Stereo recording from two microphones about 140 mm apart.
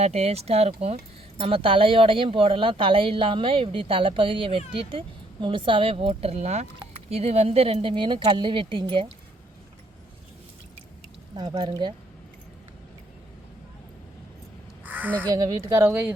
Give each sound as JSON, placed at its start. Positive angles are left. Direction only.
{"t": 0.0, "sound": "speech", "side_deg": -50}
{"t": 11.3, "sound": "speech", "side_deg": -30}
{"t": 14.8, "sound": "crow", "side_deg": -15}
{"t": 15.3, "sound": "speech", "side_deg": -25}
{"t": 15.9, "sound": "speech", "side_deg": -10}